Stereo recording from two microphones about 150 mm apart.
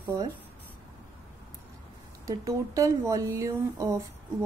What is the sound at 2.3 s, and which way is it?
Speech, 20° right (ahead or behind).